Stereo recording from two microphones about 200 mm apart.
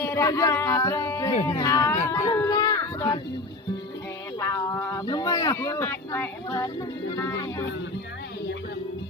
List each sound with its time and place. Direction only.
0.1 s speech: 15° left (ahead or behind)
2.3 s children playing: 15° left (ahead or behind)
4.4 s speech: 15° left (ahead or behind)